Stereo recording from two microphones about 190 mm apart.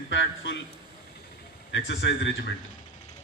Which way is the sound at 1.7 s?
70° left (ahead or behind).